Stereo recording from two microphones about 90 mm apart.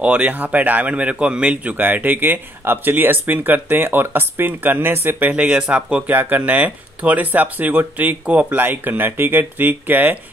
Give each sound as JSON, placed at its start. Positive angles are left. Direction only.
{"t": 0.0, "sound": "speech", "side_deg": -15}
{"t": 5.3, "sound": "speech", "side_deg": -15}